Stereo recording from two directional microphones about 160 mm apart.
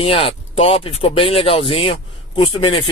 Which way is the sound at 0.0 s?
35° left (ahead or behind).